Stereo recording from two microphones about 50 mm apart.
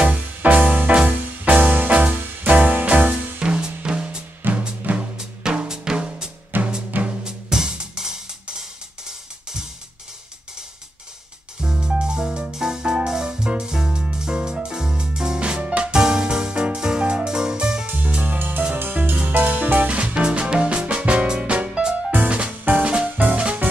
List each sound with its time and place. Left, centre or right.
0.0 s music: right
3.4 s drum: centre
4.4 s music: right
4.9 s drum: right
5.4 s drum: centre
6.5 s drum: right
6.9 s music: right
7.2 s music: centre
11.6 s music: centre
17.8 s music: right